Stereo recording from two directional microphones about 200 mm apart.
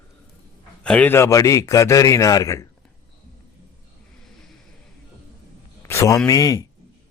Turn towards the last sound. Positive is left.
turn(degrees=20)  # may be behind; listen again after turning